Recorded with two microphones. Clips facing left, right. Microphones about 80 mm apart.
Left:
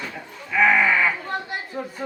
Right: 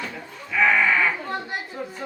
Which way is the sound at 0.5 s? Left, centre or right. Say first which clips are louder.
Left 1 dB; centre.